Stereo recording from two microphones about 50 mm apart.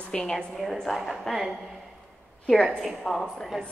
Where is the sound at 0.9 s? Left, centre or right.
Centre.